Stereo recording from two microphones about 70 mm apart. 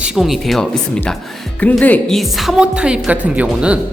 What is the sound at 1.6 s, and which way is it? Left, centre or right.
Speech, left.